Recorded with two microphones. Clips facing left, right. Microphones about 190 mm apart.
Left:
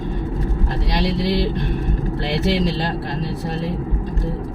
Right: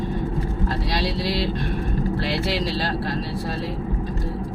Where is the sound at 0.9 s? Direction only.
20° left (ahead or behind).